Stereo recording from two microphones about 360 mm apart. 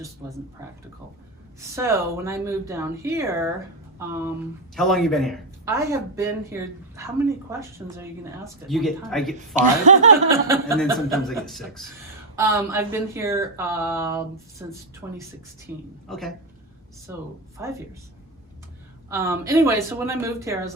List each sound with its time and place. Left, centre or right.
0.6 s speech: centre
9.6 s speech: centre
10.2 s speech: centre
19.1 s speech: centre